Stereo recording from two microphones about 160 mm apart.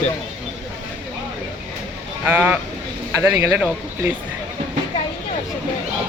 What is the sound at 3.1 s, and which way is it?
Speech, 20° right (ahead or behind).